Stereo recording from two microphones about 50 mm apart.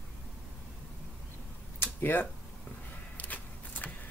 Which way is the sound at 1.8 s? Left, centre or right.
Left.